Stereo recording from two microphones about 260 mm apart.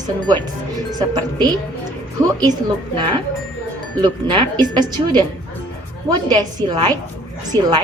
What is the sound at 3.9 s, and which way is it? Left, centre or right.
Speech, centre.